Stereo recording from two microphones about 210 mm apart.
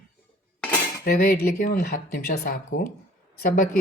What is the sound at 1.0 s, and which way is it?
Speech, 45° left (ahead or behind).